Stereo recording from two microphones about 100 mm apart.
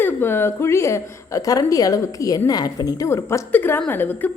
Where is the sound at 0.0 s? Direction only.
20° left (ahead or behind).